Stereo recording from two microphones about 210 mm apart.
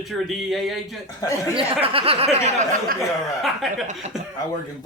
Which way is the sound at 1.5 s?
25° right (ahead or behind).